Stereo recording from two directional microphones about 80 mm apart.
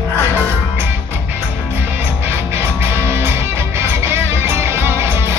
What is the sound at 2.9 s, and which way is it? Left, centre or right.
Music, right.